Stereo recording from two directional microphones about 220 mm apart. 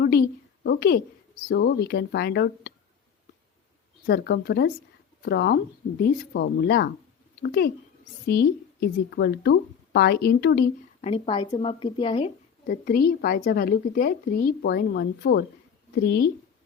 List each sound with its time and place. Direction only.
0.0 s a sound: 45° left (ahead or behind)
1.5 s a woman's voice: 50° left (ahead or behind)
4.0 s a woman's voice: 45° left (ahead or behind)
11.0 s speech: 25° left (ahead or behind)
12.6 s a woman's voice: 40° left (ahead or behind)